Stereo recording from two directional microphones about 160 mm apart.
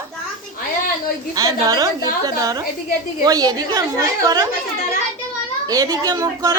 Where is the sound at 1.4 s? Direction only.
25° right (ahead or behind).